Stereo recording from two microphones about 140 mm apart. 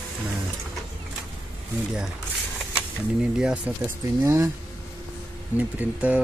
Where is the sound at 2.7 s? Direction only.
5° right (ahead or behind).